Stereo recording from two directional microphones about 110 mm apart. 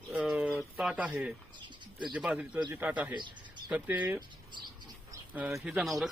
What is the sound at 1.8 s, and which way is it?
Bird, 45° right (ahead or behind).